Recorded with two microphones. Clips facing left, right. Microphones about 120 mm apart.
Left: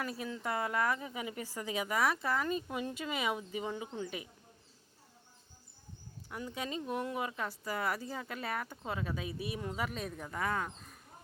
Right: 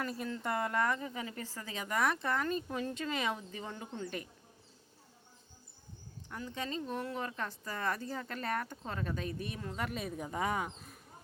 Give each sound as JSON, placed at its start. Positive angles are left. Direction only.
{"t": 0.0, "sound": "a woman's voice", "side_deg": 5}
{"t": 6.3, "sound": "a woman's voice", "side_deg": 10}
{"t": 9.7, "sound": "speech", "side_deg": 0}
{"t": 10.2, "sound": "speech", "side_deg": -20}